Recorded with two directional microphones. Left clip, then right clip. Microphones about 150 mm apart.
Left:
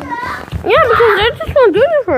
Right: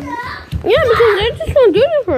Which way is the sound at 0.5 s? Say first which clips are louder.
Left 2 dB; 20° right (ahead or behind).